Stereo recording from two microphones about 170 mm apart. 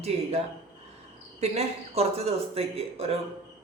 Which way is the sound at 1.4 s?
40° right (ahead or behind).